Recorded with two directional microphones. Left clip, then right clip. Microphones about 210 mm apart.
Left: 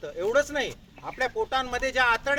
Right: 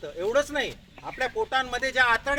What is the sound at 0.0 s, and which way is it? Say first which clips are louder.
Speech: left 1 dB; 5° left (ahead or behind).